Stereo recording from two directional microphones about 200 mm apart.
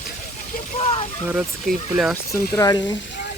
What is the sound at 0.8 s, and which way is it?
Speech, 30° left (ahead or behind).